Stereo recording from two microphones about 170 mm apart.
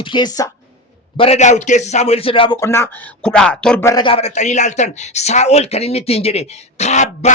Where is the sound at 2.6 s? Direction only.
15° left (ahead or behind).